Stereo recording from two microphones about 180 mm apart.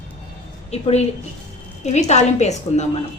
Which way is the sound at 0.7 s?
35° left (ahead or behind).